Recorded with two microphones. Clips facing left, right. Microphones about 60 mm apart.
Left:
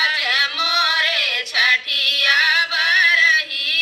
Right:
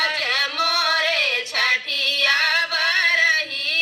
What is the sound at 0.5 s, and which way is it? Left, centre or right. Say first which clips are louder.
Music: left 1 dB; right.